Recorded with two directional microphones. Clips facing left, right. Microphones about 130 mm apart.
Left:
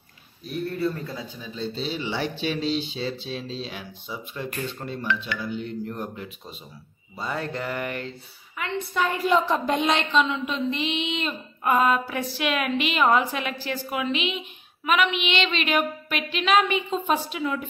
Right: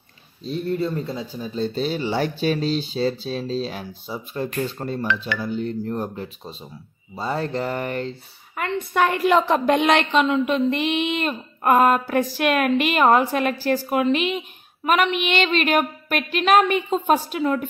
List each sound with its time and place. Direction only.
0.4 s speech: 25° right (ahead or behind)
1.3 s speech: 40° right (ahead or behind)
8.5 s a woman's voice: 50° right (ahead or behind)